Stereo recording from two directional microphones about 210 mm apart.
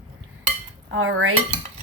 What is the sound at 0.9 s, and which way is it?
Cutlery, 75° right (ahead or behind).